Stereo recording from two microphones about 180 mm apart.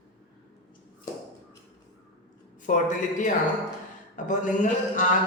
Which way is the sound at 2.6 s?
45° left (ahead or behind).